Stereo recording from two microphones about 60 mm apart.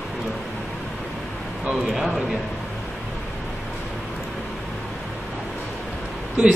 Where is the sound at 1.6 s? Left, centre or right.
Centre.